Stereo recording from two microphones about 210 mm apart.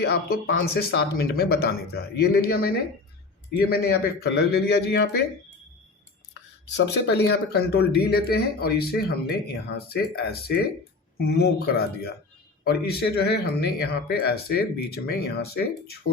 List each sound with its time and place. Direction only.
0.0 s speech: 45° left (ahead or behind)
6.7 s speech: 55° left (ahead or behind)